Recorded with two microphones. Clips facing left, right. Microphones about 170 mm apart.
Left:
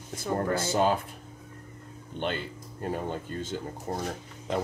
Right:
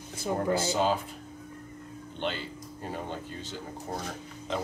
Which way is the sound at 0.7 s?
50° left (ahead or behind).